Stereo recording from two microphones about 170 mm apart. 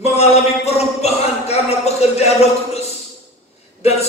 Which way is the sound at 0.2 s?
40° left (ahead or behind).